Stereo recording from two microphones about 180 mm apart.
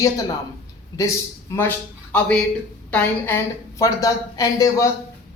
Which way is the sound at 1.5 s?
15° left (ahead or behind).